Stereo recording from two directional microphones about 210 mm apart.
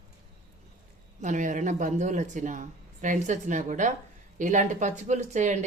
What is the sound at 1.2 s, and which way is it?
A woman's voice, 35° right (ahead or behind).